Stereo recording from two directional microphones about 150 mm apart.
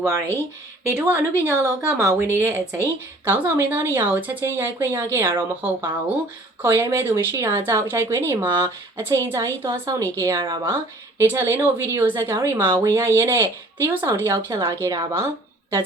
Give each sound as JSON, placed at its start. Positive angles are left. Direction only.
{"t": 0.9, "sound": "a woman's voice", "side_deg": -15}